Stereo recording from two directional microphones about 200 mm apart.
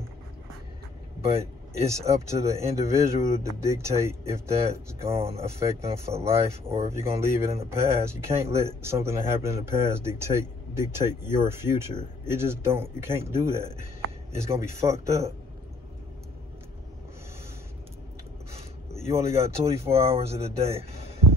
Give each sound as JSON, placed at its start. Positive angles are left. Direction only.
{"t": 1.2, "sound": "speech", "side_deg": -15}
{"t": 5.1, "sound": "speech", "side_deg": -30}
{"t": 5.4, "sound": "speech", "side_deg": -15}
{"t": 19.0, "sound": "speech", "side_deg": -15}
{"t": 20.2, "sound": "speech", "side_deg": -30}